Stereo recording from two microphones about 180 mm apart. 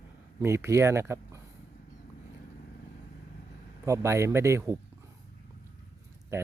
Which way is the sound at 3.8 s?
15° right (ahead or behind).